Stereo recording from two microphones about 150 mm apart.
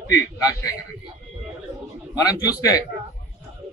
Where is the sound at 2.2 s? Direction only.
25° left (ahead or behind).